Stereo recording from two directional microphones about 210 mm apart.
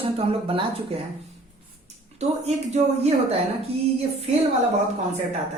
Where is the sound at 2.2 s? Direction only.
30° right (ahead or behind).